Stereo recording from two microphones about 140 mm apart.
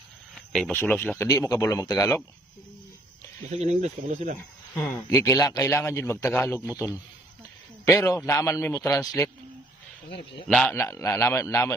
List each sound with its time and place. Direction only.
0.5 s a man's voice: 5° left (ahead or behind); by 2.2 s 25° left (ahead or behind)
3.4 s speech: 55° right (ahead or behind)
4.4 s a man's voice: 20° left (ahead or behind)
7.9 s a man's voice: 25° left (ahead or behind)
10.5 s a man's voice: 5° left (ahead or behind)
10.8 s a man's voice: 20° left (ahead or behind)